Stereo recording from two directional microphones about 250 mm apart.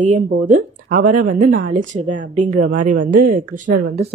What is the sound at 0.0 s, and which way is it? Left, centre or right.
A woman's voice, right.